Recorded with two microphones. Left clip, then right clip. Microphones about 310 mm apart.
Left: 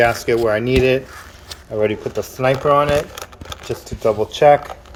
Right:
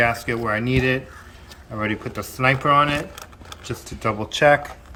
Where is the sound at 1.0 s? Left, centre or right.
Left.